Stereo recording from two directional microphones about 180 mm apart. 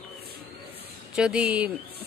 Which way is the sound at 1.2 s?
5° right (ahead or behind).